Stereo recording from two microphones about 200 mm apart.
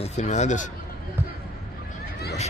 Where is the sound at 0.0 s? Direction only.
35° left (ahead or behind).